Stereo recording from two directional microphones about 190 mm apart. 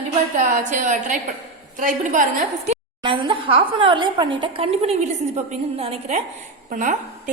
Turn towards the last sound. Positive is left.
turn(degrees=-40)  # may be behind; listen again after turning